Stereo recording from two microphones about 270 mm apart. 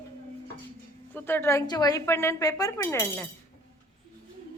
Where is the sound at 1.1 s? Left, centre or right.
Centre.